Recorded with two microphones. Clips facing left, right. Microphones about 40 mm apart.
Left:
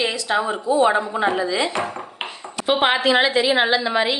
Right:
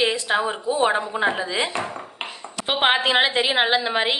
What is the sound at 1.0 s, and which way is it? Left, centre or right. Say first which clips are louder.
Speech: left 1 dB; centre.